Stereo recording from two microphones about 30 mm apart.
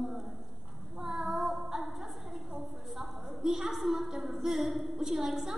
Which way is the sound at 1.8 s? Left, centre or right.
Centre.